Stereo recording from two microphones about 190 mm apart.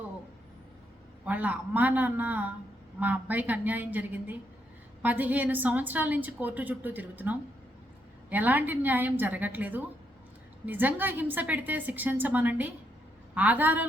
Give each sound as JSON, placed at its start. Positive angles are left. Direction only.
{"t": 1.2, "sound": "a woman's voice", "side_deg": -10}